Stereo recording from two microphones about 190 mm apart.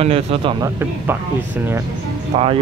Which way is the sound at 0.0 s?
30° right (ahead or behind).